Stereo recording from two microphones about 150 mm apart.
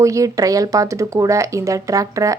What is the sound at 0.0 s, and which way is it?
Speech, 20° right (ahead or behind).